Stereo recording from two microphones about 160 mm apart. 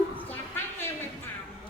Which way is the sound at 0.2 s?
10° left (ahead or behind).